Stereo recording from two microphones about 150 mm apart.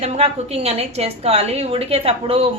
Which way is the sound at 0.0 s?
45° right (ahead or behind).